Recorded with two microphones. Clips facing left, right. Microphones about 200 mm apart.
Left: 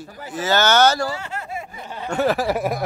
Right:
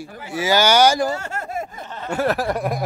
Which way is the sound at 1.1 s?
45° right (ahead or behind).